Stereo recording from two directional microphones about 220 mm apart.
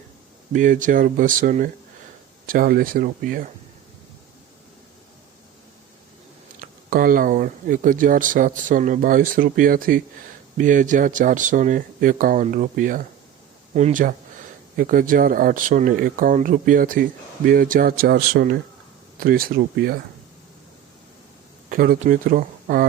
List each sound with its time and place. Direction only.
0.5 s speech: 35° right (ahead or behind)
6.6 s speech: 40° right (ahead or behind)
21.7 s speech: 40° right (ahead or behind)